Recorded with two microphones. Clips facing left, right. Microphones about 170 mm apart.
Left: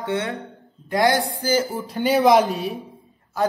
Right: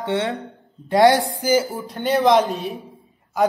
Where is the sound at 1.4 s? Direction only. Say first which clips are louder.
Right 2 dB; 10° right (ahead or behind).